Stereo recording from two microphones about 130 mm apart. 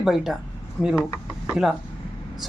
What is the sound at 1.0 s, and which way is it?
Speech, 25° left (ahead or behind).